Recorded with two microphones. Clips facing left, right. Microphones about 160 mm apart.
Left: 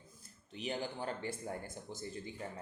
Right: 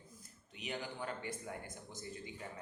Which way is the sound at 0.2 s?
30° left (ahead or behind).